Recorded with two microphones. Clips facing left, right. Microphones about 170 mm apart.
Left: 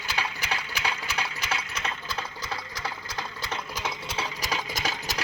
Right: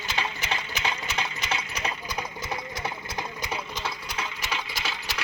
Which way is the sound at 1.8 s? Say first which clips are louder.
Right 2 dB; 15° right (ahead or behind).